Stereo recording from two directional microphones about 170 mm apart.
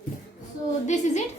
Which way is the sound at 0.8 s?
45° left (ahead or behind).